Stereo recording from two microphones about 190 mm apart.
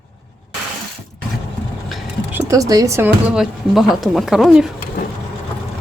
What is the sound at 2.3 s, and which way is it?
Speech, 15° right (ahead or behind).